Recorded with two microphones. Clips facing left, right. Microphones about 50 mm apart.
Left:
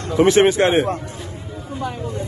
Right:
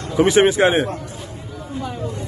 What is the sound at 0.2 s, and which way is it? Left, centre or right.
Speech, centre.